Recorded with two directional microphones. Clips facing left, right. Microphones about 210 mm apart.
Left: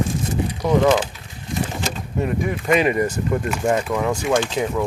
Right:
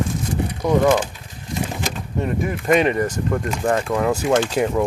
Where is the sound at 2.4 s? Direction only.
Centre (ahead or behind).